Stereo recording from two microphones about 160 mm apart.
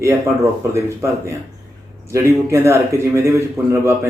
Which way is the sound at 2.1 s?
15° right (ahead or behind).